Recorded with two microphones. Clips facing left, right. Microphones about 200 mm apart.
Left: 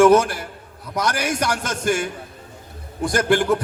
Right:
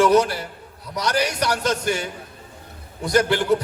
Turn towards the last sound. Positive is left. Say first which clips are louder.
# left 1 dB
turn(degrees=50)  # may be behind; listen again after turning